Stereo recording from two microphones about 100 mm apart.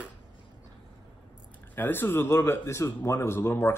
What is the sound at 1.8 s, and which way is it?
Speech, 20° left (ahead or behind).